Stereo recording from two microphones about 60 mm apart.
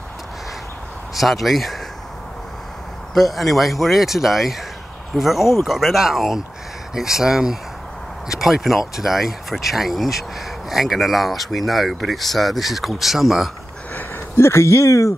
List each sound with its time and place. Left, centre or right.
1.1 s speech: centre
3.2 s speech: centre
14.3 s speech: left